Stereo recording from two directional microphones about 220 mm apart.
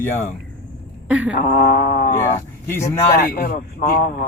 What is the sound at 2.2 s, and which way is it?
Speech, 15° left (ahead or behind).